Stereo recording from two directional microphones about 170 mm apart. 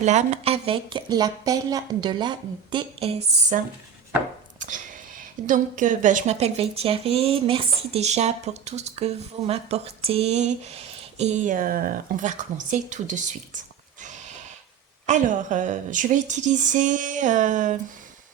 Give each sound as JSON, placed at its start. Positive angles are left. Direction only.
{"t": 0.0, "sound": "a woman's voice", "side_deg": -45}
{"t": 4.6, "sound": "speech", "side_deg": -50}
{"t": 14.0, "sound": "a sound", "side_deg": -45}
{"t": 15.0, "sound": "speech", "side_deg": -45}